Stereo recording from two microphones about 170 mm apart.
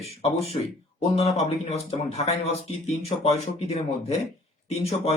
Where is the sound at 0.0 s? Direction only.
40° left (ahead or behind).